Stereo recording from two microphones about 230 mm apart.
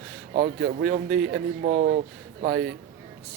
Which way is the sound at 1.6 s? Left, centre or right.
Right.